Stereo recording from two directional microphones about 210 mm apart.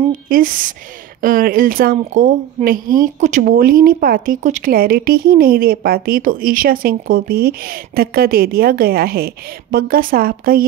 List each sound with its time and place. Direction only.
0.3 s a woman's voice: 40° right (ahead or behind)